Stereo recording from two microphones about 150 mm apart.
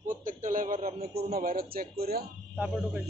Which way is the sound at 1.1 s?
80° right.